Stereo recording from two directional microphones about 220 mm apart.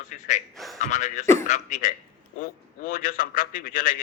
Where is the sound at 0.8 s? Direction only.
30° left (ahead or behind).